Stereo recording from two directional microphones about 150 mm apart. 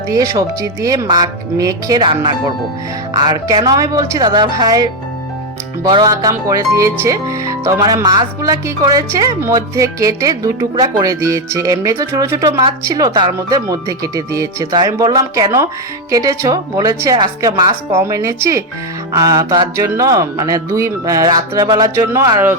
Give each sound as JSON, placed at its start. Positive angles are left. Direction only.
{"t": 0.1, "sound": "speech", "side_deg": -25}